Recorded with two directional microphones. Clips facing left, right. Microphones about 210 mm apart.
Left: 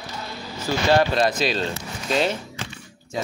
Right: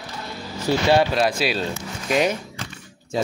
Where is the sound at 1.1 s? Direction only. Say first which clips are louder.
Even; 10° right (ahead or behind).